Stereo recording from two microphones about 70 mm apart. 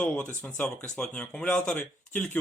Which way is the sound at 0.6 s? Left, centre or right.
Left.